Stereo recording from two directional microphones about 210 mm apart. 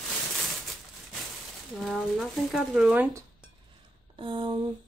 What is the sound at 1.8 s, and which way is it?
Speech, centre (ahead or behind).